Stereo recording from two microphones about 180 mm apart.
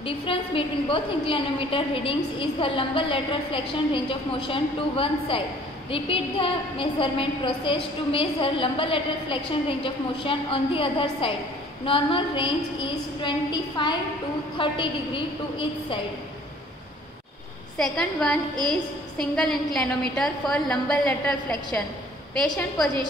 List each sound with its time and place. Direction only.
0.0 s a woman's voice: 30° left (ahead or behind)
17.7 s a woman's voice: 5° left (ahead or behind)